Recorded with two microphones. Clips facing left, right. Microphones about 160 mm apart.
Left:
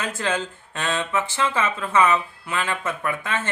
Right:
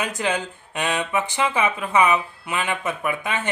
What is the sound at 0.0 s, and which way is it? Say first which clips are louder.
Speech: right 1 dB; 15° right (ahead or behind).